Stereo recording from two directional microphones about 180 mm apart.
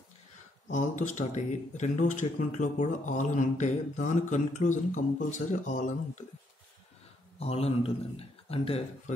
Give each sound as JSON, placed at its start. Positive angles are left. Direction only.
{"t": 0.7, "sound": "speech", "side_deg": 45}
{"t": 7.3, "sound": "a man's voice", "side_deg": 35}